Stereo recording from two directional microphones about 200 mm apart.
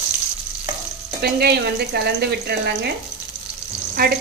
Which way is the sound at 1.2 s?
55° right (ahead or behind).